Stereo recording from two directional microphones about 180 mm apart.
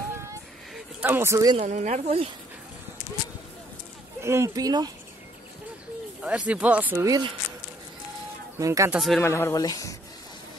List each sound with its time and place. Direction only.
0.7 s speech: 10° right (ahead or behind)
1.6 s speech: 40° right (ahead or behind)
4.2 s speech: 15° right (ahead or behind)
6.2 s speech: 5° right (ahead or behind)
8.5 s speech: 15° right (ahead or behind)
8.9 s speech: centre (ahead or behind)
9.2 s speech: 15° left (ahead or behind)